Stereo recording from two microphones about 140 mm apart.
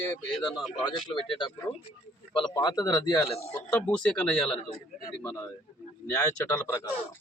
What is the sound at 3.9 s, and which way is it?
Speech, 5° left (ahead or behind).